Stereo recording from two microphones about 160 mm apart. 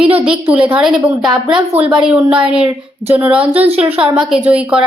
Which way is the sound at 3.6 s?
40° right (ahead or behind).